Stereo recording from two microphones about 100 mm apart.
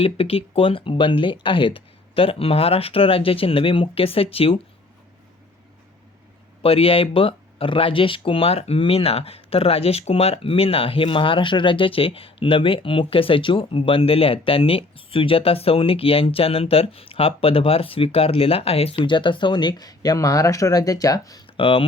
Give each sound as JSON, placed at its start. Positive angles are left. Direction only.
{"t": 0.0, "sound": "speech", "side_deg": 75}
{"t": 6.6, "sound": "speech", "side_deg": 70}
{"t": 19.0, "sound": "speech", "side_deg": 55}
{"t": 21.4, "sound": "a sound", "side_deg": 60}